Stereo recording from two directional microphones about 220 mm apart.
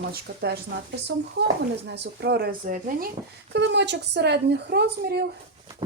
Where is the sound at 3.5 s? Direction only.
50° right (ahead or behind).